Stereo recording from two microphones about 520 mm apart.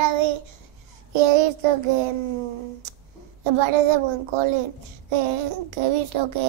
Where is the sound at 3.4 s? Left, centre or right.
Right.